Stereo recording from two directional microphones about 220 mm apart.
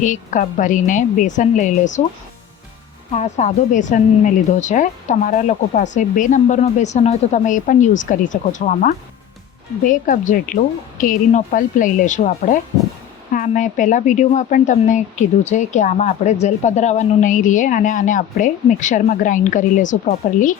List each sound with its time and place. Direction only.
0.0 s speech: 35° left (ahead or behind)
3.1 s speech: 30° left (ahead or behind)
13.3 s speech: 35° left (ahead or behind)